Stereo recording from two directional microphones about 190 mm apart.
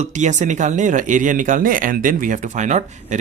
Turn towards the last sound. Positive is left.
turn(degrees=-40)  # may be behind; listen again after turning